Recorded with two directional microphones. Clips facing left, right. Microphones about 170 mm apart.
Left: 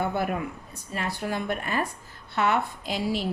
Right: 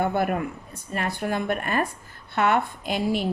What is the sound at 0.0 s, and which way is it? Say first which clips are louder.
Speech: right 3 dB; 55° right (ahead or behind).